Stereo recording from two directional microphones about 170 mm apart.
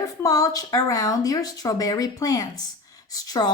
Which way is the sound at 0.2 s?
20° left (ahead or behind).